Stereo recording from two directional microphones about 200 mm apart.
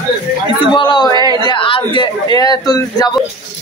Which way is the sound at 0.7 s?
25° left (ahead or behind).